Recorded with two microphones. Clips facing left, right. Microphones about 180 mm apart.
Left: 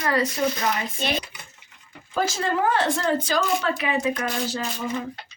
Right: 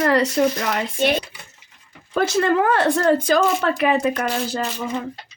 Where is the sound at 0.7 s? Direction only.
65° right (ahead or behind).